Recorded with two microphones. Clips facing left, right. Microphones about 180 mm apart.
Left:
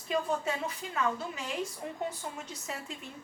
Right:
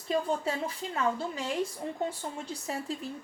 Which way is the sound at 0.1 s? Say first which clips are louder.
Right 2 dB; 30° right (ahead or behind).